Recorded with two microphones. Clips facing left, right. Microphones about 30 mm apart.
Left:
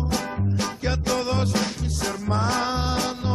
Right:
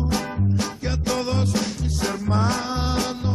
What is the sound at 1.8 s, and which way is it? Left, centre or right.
Music, centre.